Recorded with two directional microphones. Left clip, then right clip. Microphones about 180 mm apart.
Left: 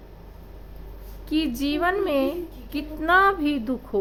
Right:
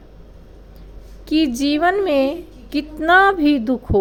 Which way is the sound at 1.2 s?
30° right (ahead or behind).